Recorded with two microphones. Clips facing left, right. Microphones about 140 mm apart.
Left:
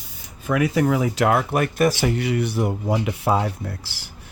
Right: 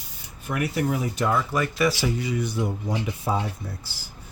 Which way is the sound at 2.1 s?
70° left (ahead or behind).